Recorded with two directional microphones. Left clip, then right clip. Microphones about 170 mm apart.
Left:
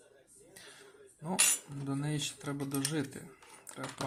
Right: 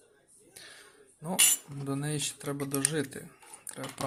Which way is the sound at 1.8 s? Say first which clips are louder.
Right 2 dB; 20° right (ahead or behind).